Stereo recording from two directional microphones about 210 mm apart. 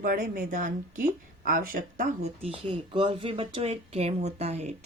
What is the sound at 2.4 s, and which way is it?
Speech, 25° right (ahead or behind).